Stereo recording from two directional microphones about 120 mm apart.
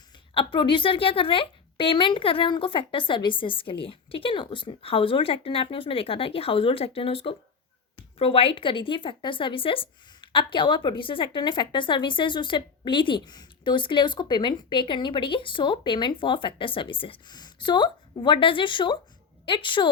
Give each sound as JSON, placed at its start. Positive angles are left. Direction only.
{"t": 0.3, "sound": "speech", "side_deg": 45}